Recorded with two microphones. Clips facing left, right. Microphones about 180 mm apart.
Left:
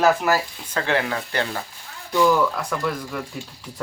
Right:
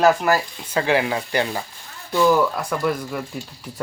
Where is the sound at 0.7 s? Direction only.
10° right (ahead or behind).